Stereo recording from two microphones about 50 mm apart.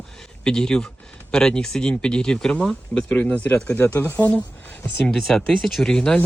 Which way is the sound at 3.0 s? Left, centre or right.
Left.